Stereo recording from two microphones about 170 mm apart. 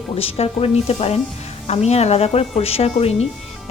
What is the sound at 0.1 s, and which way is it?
Speech, 35° left (ahead or behind).